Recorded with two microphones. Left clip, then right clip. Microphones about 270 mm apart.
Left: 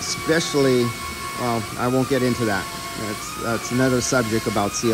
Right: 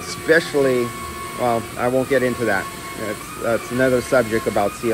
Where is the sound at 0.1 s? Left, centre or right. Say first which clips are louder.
Right 5 dB; centre.